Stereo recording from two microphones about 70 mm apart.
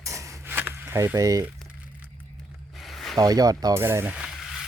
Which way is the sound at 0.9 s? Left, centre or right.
Right.